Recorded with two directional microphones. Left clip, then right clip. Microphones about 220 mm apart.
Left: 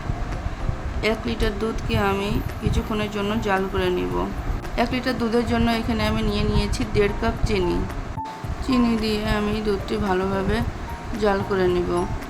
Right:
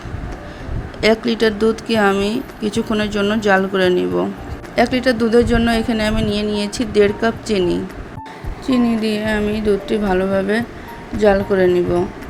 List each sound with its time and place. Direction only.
1.0 s speech: 25° right (ahead or behind)
8.6 s a woman's voice: 10° right (ahead or behind)